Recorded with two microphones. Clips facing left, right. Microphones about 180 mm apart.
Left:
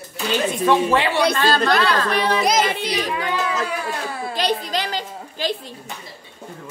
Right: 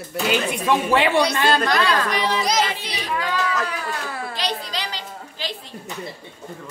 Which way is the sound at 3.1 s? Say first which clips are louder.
Even; 20° left (ahead or behind).